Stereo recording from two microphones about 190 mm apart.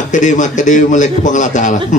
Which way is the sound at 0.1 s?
40° left (ahead or behind).